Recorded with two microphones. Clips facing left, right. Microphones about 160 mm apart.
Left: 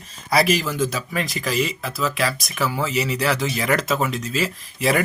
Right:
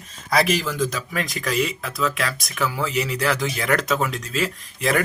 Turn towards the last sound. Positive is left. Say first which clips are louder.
# left 1 dB
turn(degrees=5)  # may be behind; listen again after turning